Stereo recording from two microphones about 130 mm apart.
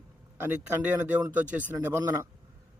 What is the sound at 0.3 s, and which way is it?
Speech, 15° right (ahead or behind).